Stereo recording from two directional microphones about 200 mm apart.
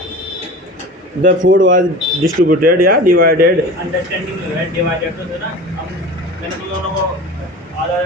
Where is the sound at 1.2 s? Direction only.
40° right (ahead or behind).